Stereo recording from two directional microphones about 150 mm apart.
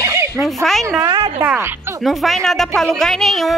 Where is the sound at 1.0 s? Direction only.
30° right (ahead or behind).